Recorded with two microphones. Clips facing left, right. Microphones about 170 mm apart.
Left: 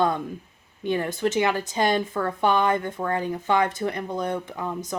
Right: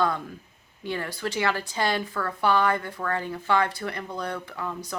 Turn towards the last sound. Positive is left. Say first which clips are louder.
# left 4 dB
turn(degrees=20)  # may be behind; listen again after turning